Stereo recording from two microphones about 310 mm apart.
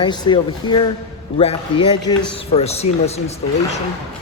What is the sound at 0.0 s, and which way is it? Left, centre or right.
Speech, centre.